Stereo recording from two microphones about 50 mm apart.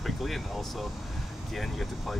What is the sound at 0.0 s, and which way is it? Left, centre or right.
Speech, centre.